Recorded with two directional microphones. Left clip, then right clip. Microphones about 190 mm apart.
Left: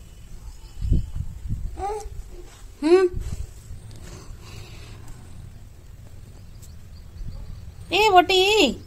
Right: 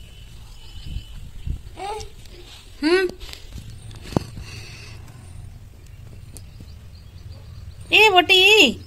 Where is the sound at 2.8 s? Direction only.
10° left (ahead or behind).